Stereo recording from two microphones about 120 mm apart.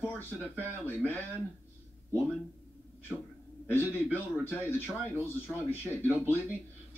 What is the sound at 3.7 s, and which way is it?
A man's voice, 15° left (ahead or behind).